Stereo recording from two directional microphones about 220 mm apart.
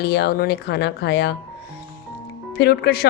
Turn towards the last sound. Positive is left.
turn(degrees=45)  # may be behind; listen again after turning